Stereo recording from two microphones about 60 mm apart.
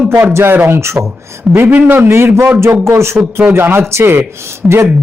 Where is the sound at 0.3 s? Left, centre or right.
Right.